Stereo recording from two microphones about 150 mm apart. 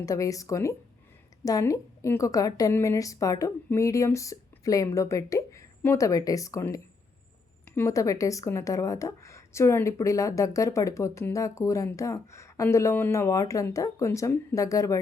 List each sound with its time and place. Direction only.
0.0 s a woman's voice: 20° left (ahead or behind)